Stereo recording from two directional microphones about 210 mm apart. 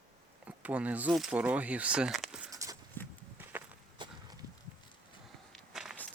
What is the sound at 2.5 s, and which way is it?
Walk, 15° right (ahead or behind).